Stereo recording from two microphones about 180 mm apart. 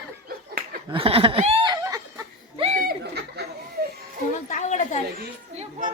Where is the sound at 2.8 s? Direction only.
60° right (ahead or behind).